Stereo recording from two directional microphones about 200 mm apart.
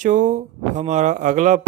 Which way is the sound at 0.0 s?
40° right (ahead or behind).